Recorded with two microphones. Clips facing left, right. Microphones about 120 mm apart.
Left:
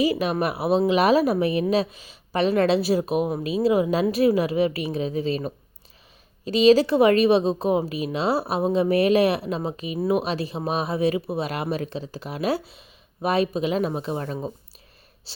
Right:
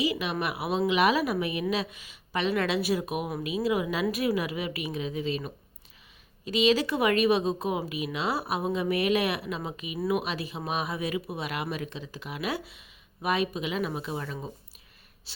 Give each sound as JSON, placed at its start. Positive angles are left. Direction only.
{"t": 0.0, "sound": "speech", "side_deg": 40}